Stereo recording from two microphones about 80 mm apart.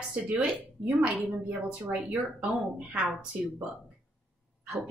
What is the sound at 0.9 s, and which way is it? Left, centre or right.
A woman's voice, centre.